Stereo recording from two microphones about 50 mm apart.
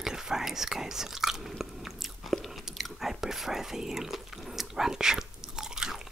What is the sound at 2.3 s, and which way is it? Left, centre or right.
Chewing, centre.